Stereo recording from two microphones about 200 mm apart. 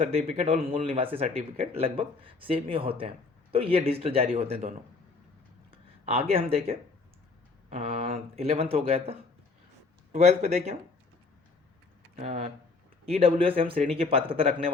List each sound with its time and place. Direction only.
0.0 s speech: 30° right (ahead or behind)
5.7 s speech: 30° right (ahead or behind)
12.1 s speech: 30° right (ahead or behind)